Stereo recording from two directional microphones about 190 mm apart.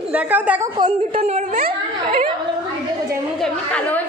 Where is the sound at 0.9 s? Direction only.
35° right (ahead or behind).